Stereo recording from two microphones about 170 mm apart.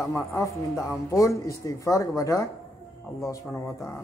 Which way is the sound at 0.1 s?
15° left (ahead or behind).